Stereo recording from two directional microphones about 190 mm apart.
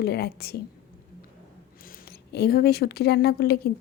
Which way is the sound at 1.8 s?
55° left (ahead or behind).